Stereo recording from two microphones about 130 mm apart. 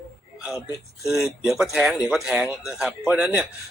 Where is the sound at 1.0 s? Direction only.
5° right (ahead or behind).